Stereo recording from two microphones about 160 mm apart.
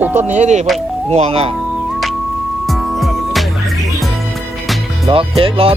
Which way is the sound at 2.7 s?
Centre (ahead or behind).